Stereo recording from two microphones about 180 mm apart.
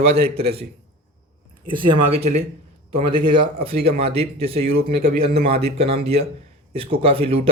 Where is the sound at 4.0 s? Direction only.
35° right (ahead or behind).